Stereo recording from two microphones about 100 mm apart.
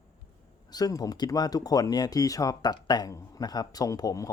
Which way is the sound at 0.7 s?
40° left (ahead or behind).